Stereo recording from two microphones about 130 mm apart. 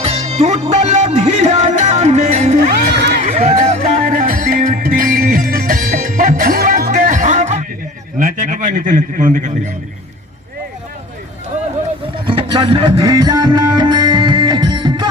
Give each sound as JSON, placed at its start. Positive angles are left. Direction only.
{"t": 0.0, "sound": "music", "side_deg": -55}
{"t": 8.2, "sound": "a man's voice", "side_deg": -80}
{"t": 12.3, "sound": "music", "side_deg": -45}